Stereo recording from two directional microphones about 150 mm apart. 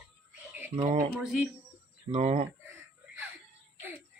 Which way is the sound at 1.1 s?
5° right (ahead or behind).